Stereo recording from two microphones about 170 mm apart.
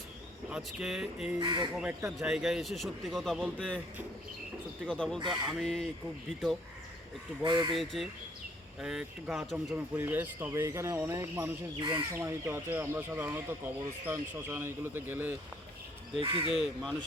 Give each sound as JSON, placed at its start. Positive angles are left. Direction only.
{"t": 0.5, "sound": "a man's voice", "side_deg": -5}
{"t": 1.4, "sound": "speech", "side_deg": -25}
{"t": 1.7, "sound": "a man's voice", "side_deg": -5}
{"t": 4.9, "sound": "a man's voice", "side_deg": 5}
{"t": 7.4, "sound": "speech", "side_deg": -25}
{"t": 8.8, "sound": "a man's voice", "side_deg": -5}
{"t": 9.9, "sound": "speech", "side_deg": -10}
{"t": 11.8, "sound": "speech", "side_deg": -30}
{"t": 12.1, "sound": "speech", "side_deg": -15}
{"t": 16.2, "sound": "speech", "side_deg": -30}
{"t": 16.5, "sound": "a man's voice", "side_deg": -5}